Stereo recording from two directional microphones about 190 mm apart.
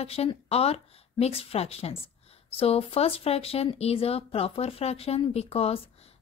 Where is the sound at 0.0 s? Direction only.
30° left (ahead or behind).